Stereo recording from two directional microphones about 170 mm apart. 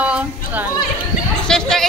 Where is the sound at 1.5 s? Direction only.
5° left (ahead or behind).